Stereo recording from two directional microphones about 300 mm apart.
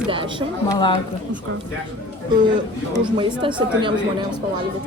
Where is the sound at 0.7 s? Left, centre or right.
Centre.